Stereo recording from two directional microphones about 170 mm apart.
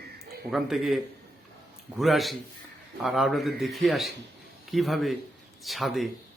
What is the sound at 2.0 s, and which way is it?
Speech, centre (ahead or behind).